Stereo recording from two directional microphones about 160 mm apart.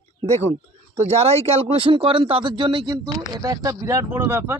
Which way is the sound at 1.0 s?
40° right (ahead or behind).